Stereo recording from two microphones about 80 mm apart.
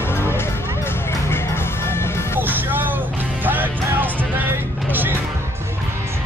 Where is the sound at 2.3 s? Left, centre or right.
Right.